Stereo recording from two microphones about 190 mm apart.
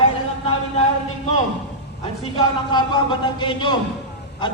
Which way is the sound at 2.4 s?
25° left (ahead or behind).